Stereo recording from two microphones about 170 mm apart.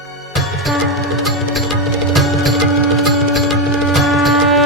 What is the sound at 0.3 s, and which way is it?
Music, centre (ahead or behind).